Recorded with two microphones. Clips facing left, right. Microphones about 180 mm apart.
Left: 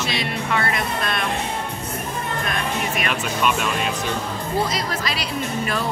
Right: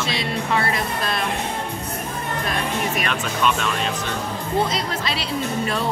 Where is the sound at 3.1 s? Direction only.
10° left (ahead or behind).